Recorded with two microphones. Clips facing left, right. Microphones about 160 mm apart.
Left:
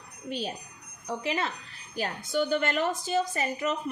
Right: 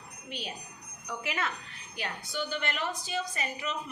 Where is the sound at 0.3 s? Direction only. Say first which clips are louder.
Left 7 dB; 40° left (ahead or behind).